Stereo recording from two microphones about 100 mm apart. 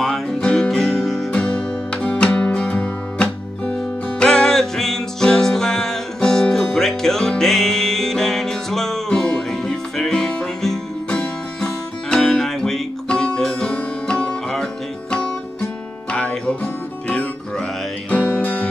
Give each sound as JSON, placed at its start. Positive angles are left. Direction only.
{"t": 0.0, "sound": "music", "side_deg": 5}
{"t": 1.3, "sound": "music", "side_deg": 10}